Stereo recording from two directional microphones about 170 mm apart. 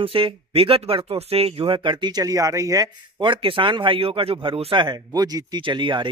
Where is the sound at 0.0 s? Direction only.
30° right (ahead or behind).